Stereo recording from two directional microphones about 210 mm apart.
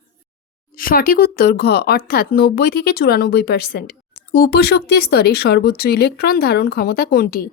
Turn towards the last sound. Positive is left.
turn(degrees=45)  # may be behind; listen again after turning